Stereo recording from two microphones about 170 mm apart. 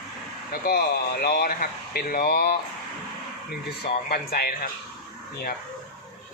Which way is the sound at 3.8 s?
65° left (ahead or behind).